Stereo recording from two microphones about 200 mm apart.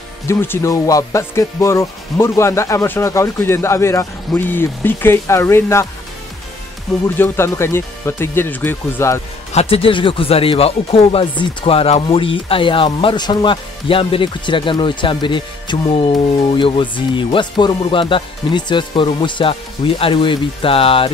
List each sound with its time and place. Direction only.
0.3 s speech: 10° left (ahead or behind)
7.2 s speech: 15° left (ahead or behind)
9.5 s speech: 30° left (ahead or behind)